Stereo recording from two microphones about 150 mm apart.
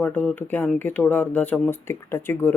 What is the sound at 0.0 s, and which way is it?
Speech, 10° left (ahead or behind).